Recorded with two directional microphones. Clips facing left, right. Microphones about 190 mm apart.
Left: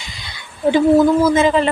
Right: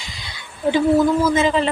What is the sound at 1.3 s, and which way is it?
Speech, 55° left (ahead or behind).